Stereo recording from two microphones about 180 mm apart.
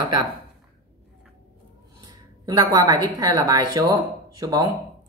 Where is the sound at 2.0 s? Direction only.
20° right (ahead or behind).